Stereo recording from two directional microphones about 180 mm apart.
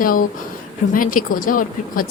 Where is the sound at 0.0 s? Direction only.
50° left (ahead or behind).